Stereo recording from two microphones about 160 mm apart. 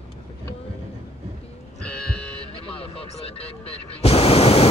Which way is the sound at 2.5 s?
35° left (ahead or behind).